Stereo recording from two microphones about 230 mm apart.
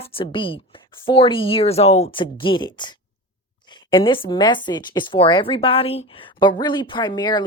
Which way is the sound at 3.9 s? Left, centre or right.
Left.